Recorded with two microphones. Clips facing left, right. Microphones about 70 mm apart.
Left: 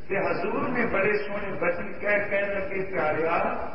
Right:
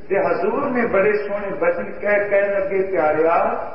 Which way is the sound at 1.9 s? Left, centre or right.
Right.